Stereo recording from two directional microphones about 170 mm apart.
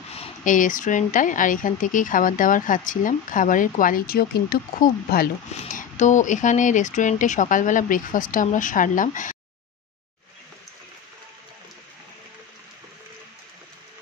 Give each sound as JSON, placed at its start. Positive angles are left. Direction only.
{"t": 0.1, "sound": "speech", "side_deg": 45}